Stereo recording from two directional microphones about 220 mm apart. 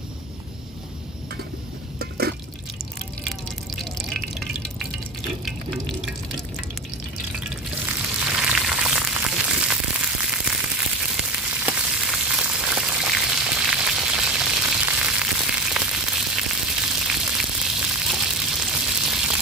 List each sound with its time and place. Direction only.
2.0 s liquid: 45° right (ahead or behind)
3.7 s drip: centre (ahead or behind)
5.4 s water: centre (ahead or behind)
8.2 s frying: 5° right (ahead or behind)
17.1 s a sound: 5° right (ahead or behind)